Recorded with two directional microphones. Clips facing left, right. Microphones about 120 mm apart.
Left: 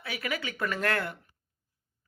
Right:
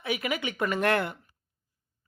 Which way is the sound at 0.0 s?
15° right (ahead or behind).